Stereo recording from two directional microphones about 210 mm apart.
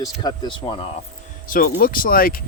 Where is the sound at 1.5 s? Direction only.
40° left (ahead or behind).